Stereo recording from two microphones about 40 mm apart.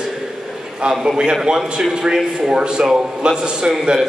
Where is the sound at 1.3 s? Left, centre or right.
Centre.